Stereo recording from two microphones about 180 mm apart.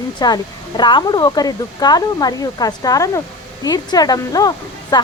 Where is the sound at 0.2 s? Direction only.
20° left (ahead or behind).